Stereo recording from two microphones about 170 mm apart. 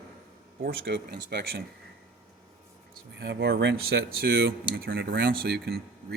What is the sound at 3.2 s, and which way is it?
Speech, 75° right (ahead or behind).